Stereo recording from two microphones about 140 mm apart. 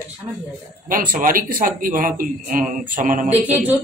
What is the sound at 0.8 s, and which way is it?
A man's voice, 75° right (ahead or behind).